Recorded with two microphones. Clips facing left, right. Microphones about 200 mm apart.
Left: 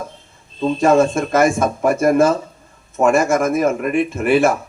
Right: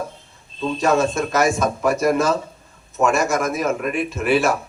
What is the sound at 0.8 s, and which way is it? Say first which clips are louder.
A man's voice: left 4 dB; 50° left (ahead or behind).